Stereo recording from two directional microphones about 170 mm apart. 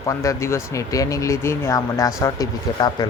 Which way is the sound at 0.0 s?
20° left (ahead or behind).